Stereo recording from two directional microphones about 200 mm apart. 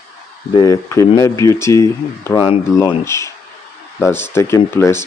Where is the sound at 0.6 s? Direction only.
15° left (ahead or behind).